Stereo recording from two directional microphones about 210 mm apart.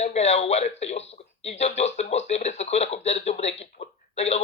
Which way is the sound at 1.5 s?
30° left (ahead or behind).